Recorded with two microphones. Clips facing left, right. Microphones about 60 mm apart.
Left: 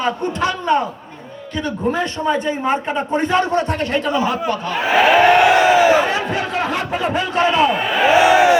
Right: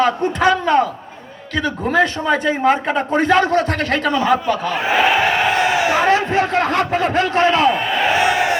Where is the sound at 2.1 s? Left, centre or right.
Right.